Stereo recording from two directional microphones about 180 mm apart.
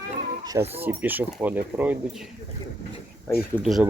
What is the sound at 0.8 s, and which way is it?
Speech, 10° right (ahead or behind).